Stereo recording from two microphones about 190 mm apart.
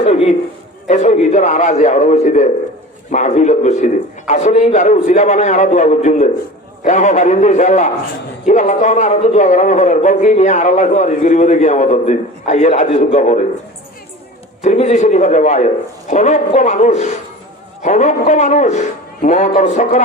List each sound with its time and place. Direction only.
0.0 s a sound: 35° left (ahead or behind)
0.9 s a man's voice: 40° left (ahead or behind)
14.6 s a man's voice: 40° left (ahead or behind)